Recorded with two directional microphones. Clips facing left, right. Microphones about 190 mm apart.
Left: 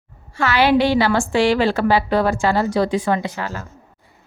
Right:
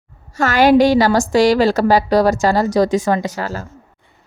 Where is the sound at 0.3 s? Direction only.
45° right (ahead or behind).